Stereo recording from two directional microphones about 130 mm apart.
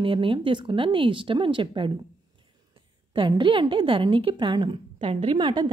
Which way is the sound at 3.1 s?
40° right (ahead or behind).